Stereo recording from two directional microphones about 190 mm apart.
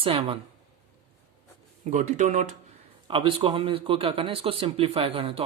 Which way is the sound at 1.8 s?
40° right (ahead or behind).